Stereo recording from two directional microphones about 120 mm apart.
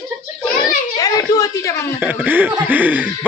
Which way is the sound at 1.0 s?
30° left (ahead or behind).